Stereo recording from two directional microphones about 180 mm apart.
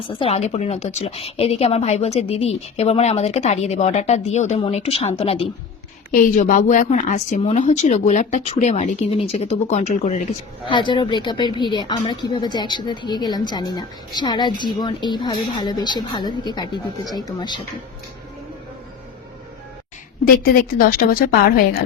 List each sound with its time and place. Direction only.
0.2 s a woman's voice: 35° left (ahead or behind)
6.1 s a woman's voice: 50° left (ahead or behind)
10.7 s a woman's voice: 25° left (ahead or behind)
20.2 s a woman's voice: 55° left (ahead or behind)